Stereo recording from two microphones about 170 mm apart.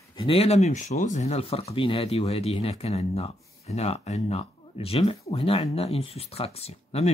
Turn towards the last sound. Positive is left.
turn(degrees=35)  # may be behind; listen again after turning